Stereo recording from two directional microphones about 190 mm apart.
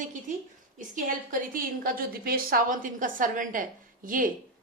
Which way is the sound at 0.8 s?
45° right (ahead or behind).